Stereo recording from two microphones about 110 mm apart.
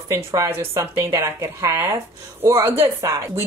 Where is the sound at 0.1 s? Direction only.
25° right (ahead or behind).